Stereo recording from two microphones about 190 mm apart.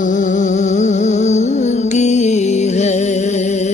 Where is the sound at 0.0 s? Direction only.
40° left (ahead or behind).